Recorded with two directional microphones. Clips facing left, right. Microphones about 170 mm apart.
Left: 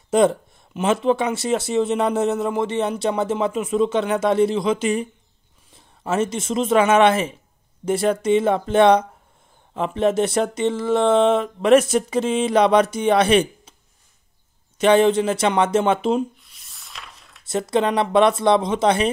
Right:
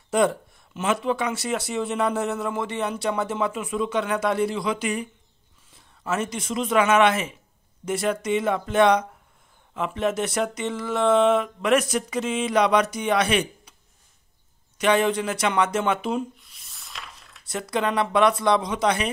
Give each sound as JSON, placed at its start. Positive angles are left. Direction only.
{"t": 0.1, "sound": "speech", "side_deg": 25}
{"t": 14.8, "sound": "speech", "side_deg": 30}
{"t": 16.3, "sound": "a sound", "side_deg": 0}
{"t": 17.5, "sound": "speech", "side_deg": 25}